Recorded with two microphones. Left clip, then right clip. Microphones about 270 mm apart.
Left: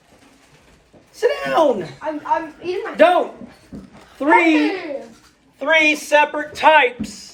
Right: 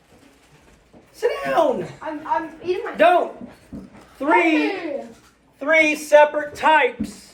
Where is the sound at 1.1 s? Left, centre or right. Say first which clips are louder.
Left 2 dB; left.